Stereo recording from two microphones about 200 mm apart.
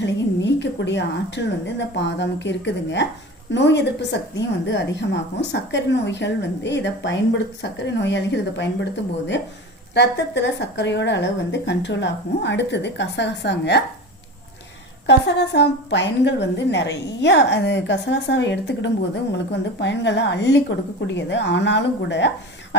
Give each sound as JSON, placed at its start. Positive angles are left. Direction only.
{"t": 0.0, "sound": "a woman's voice", "side_deg": 60}
{"t": 15.0, "sound": "a woman's voice", "side_deg": 60}